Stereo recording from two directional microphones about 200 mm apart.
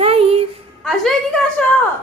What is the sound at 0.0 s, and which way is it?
Child singing, 30° right (ahead or behind).